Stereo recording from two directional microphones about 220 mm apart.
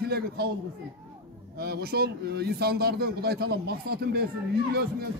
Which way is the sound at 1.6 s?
45° right (ahead or behind).